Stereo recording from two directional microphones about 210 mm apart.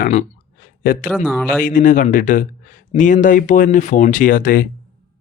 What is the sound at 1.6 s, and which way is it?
Speech, 40° left (ahead or behind).